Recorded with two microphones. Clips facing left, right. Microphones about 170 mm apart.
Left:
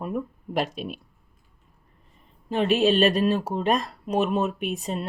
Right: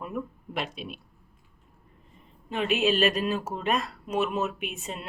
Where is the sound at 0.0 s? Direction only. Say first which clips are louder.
Left 4 dB; 40° left (ahead or behind).